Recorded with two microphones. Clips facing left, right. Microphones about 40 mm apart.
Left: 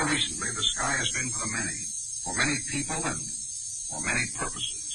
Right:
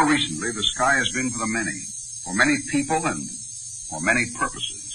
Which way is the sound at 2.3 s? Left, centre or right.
Right.